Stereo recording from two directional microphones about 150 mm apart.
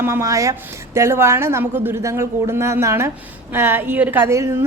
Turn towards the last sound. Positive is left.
turn(degrees=-20)  # may be behind; listen again after turning